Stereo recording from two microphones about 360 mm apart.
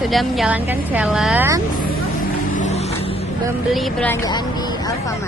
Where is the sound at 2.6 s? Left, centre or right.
Centre.